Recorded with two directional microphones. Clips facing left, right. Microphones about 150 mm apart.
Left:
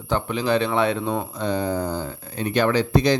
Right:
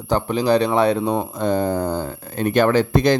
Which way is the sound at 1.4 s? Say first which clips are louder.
Right 4 dB; 50° right (ahead or behind).